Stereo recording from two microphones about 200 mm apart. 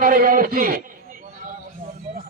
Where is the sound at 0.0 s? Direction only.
45° right (ahead or behind).